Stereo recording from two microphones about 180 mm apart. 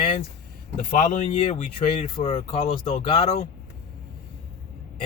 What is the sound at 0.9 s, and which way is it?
Speech, 40° left (ahead or behind).